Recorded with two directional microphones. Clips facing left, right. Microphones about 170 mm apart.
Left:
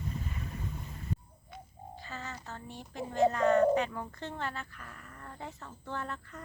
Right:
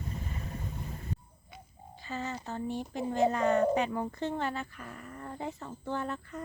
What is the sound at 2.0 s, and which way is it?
A woman's voice, 20° right (ahead or behind).